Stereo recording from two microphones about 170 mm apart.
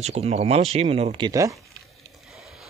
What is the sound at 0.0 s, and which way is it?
Speech, 40° right (ahead or behind).